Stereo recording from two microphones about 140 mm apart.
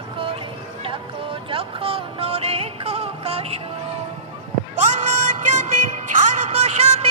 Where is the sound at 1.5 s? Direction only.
40° right (ahead or behind).